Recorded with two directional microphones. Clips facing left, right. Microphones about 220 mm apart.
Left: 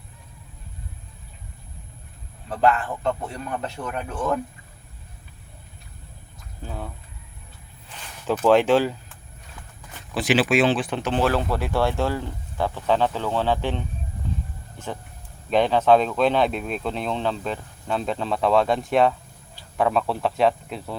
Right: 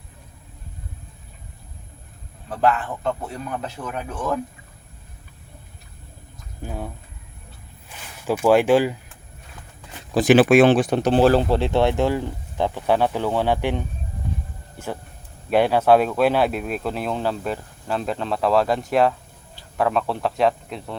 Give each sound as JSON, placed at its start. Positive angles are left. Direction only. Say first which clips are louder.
{"t": 2.5, "sound": "speech", "louder": "even", "side_deg": 0}
{"t": 6.6, "sound": "speech", "louder": "right 3 dB", "side_deg": -15}
{"t": 7.9, "sound": "a sound", "louder": "right 1 dB", "side_deg": -10}
{"t": 10.2, "sound": "speech", "louder": "right 7 dB", "side_deg": -50}
{"t": 14.8, "sound": "a sound", "louder": "right 2 dB", "side_deg": -10}
{"t": 15.4, "sound": "speech", "louder": "right 1 dB", "side_deg": -10}